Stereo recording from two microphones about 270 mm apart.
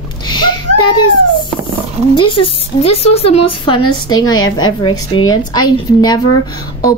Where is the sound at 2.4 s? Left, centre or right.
Left.